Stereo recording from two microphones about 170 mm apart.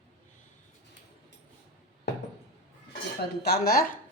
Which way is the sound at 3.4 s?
65° left (ahead or behind).